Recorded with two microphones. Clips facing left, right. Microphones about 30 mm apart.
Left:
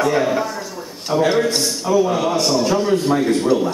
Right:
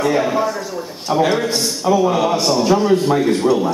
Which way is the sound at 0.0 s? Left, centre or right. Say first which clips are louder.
Right 1 dB; centre.